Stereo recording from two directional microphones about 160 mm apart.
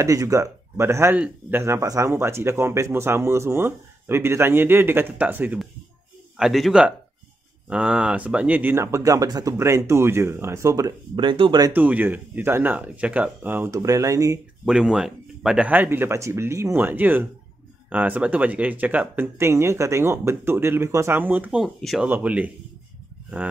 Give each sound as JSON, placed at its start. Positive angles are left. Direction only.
{"t": 0.0, "sound": "speech", "side_deg": -20}
{"t": 11.7, "sound": "speech", "side_deg": -10}
{"t": 14.6, "sound": "speech", "side_deg": -5}